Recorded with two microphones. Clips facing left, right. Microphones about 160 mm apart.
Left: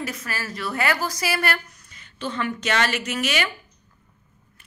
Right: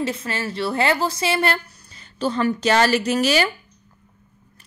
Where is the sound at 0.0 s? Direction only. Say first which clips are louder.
Right 6 dB; 25° right (ahead or behind).